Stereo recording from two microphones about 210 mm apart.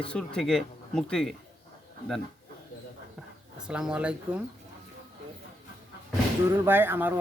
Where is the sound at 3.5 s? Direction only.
5° right (ahead or behind).